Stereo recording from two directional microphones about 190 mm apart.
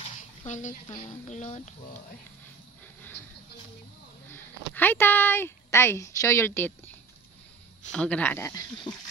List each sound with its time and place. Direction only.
0.0 s a sound: 35° left (ahead or behind)
0.9 s speech: 35° left (ahead or behind)
4.7 s a woman's voice: 10° left (ahead or behind)
7.9 s a woman's voice: 5° left (ahead or behind)
8.9 s speech: 25° left (ahead or behind)